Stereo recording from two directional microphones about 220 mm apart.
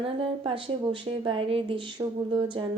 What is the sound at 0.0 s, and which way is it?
Speech, 25° right (ahead or behind).